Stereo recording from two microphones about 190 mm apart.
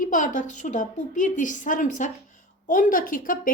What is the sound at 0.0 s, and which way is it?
A woman's voice, 40° left (ahead or behind).